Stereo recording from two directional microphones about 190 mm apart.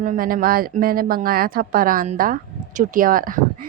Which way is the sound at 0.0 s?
45° right (ahead or behind).